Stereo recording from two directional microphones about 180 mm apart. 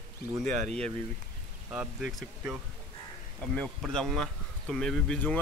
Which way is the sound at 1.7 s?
5° right (ahead or behind).